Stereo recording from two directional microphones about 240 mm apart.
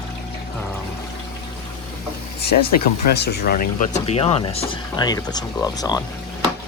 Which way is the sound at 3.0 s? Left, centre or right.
Left.